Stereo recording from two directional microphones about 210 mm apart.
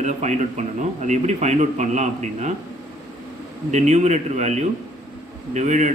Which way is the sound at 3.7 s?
35° right (ahead or behind).